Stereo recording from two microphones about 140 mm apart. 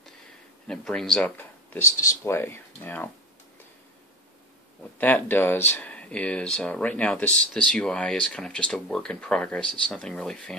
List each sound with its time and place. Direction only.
0.7 s speech: 5° left (ahead or behind)
4.9 s speech: 15° left (ahead or behind)